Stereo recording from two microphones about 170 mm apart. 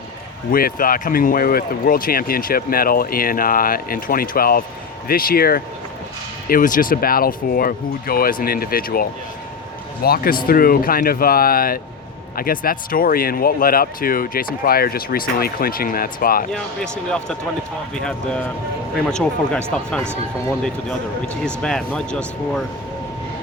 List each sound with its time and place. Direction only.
0.5 s speech: 55° left (ahead or behind)
16.5 s speech: 5° left (ahead or behind)
21.4 s speech: 5° left (ahead or behind)